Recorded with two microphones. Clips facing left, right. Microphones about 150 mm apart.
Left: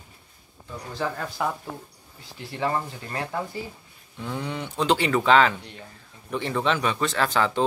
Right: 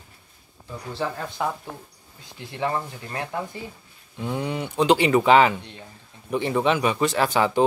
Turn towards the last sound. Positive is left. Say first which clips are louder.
# right 3 dB
turn(degrees=-15)  # may be behind; listen again after turning